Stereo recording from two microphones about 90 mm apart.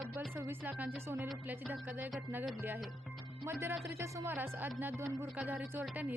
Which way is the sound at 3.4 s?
30° right (ahead or behind).